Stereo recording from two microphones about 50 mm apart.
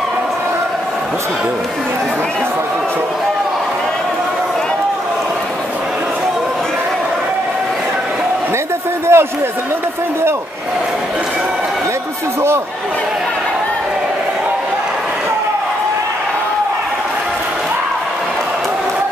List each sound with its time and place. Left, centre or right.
9.1 s run: right